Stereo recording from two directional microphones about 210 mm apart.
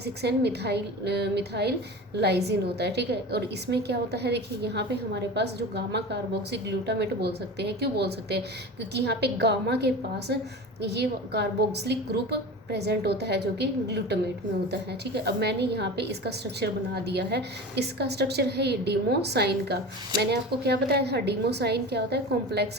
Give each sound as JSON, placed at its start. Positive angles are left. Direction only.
{"t": 0.0, "sound": "a woman's voice", "side_deg": -50}